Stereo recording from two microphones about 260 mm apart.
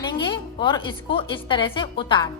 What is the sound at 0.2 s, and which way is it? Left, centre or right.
A woman's voice, centre.